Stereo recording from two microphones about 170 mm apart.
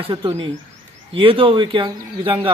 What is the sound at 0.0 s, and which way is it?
A man's voice, 25° right (ahead or behind).